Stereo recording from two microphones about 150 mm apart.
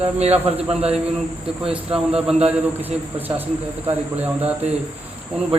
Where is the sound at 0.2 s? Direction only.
45° right (ahead or behind).